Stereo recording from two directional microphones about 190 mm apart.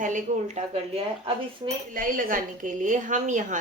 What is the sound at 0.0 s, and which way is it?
Speech, 40° right (ahead or behind).